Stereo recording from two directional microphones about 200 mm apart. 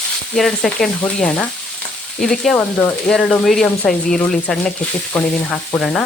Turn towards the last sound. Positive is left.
turn(degrees=5)  # may be behind; listen again after turning